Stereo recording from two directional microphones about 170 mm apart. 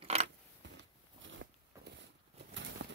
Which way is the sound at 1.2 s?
90° right.